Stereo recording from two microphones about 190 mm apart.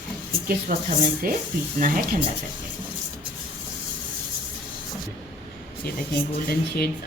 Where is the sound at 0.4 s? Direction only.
50° right (ahead or behind).